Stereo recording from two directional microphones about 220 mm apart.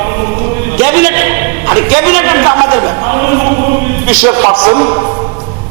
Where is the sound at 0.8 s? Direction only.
15° right (ahead or behind).